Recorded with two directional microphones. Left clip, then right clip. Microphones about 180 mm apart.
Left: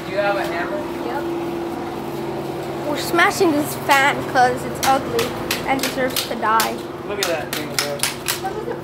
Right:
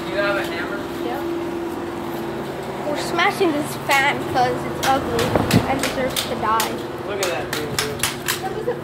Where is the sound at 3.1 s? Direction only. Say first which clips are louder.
Left 3 dB; 35° left (ahead or behind).